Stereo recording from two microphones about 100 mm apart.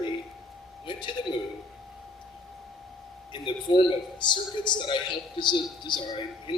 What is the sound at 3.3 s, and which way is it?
A man's voice, 50° left (ahead or behind).